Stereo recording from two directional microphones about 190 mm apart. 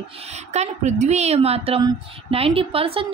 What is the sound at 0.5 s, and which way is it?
A woman's voice, 35° right (ahead or behind).